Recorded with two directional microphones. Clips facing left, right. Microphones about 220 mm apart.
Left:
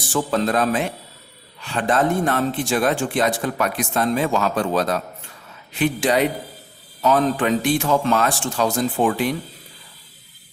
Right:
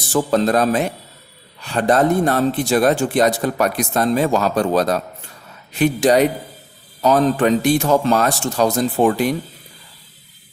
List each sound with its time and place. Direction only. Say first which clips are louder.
0.1 s speech: right 4 dB; 40° right (ahead or behind)